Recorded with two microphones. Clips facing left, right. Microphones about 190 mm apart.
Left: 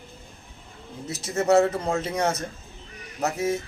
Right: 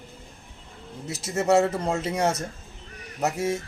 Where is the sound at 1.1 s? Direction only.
Centre (ahead or behind).